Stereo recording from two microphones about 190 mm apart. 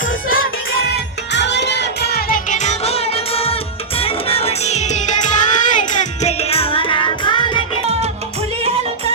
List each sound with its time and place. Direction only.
0.0 s music: 45° left (ahead or behind)
0.9 s music: 65° left (ahead or behind); by 7.6 s 25° left (ahead or behind)